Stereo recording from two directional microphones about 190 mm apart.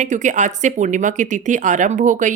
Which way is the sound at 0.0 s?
40° right (ahead or behind).